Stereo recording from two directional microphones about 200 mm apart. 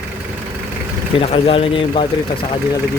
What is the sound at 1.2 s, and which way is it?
Speech, 30° left (ahead or behind).